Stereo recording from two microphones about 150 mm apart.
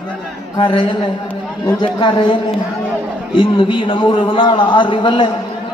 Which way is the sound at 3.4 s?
35° left (ahead or behind).